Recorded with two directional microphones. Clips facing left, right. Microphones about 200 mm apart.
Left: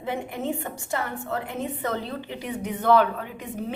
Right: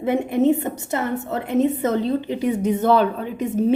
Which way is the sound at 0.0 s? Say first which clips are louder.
Right 11 dB; 20° right (ahead or behind).